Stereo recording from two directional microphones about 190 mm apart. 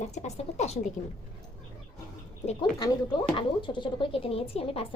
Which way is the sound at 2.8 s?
25° left (ahead or behind).